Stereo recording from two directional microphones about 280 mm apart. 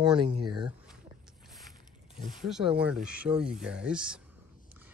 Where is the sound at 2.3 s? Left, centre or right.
Centre.